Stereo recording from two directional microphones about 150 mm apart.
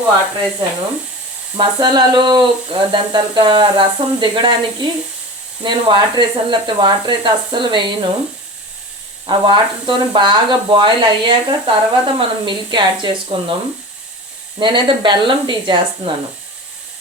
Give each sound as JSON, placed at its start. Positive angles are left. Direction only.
{"t": 1.5, "sound": "speech", "side_deg": -30}
{"t": 9.2, "sound": "speech", "side_deg": -30}
{"t": 14.6, "sound": "speech", "side_deg": -30}